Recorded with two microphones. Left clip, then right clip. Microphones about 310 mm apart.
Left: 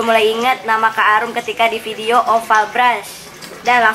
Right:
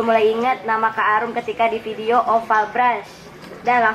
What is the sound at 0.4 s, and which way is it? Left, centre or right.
A woman's voice, centre.